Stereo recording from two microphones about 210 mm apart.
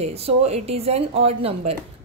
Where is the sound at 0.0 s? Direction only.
30° right (ahead or behind).